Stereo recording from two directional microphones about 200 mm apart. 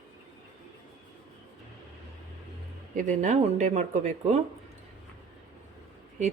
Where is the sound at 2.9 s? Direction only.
35° right (ahead or behind).